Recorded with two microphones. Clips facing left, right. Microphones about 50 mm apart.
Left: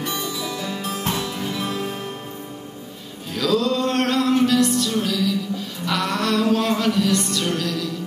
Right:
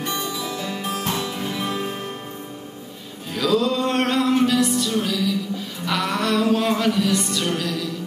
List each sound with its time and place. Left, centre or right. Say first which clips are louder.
0.0 s music: even; right
3.3 s music: even; centre